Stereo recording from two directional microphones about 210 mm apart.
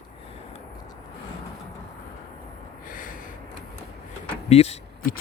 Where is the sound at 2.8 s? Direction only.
40° left (ahead or behind).